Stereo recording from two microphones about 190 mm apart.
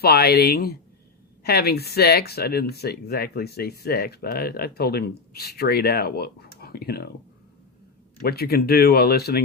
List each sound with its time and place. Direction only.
0.0 s speech: 55° left (ahead or behind)
8.2 s speech: 55° left (ahead or behind)